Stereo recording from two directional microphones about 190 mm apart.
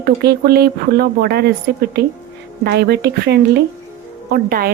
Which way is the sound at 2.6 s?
60° right (ahead or behind).